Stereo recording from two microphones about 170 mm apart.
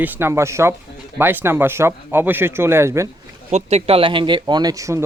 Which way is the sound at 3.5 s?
40° right (ahead or behind).